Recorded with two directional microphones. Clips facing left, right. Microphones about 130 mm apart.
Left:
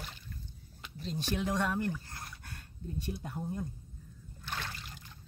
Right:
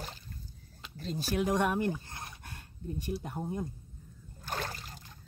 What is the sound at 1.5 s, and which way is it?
Speech, 15° right (ahead or behind).